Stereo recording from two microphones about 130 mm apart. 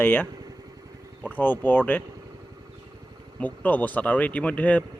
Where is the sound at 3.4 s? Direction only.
10° left (ahead or behind).